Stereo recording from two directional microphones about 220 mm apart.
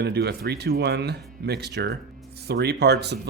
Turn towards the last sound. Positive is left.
turn(degrees=-50)  # may be behind; listen again after turning